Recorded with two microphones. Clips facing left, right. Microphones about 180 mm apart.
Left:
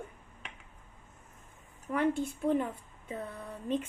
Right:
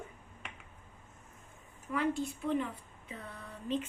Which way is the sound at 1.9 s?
55° left (ahead or behind).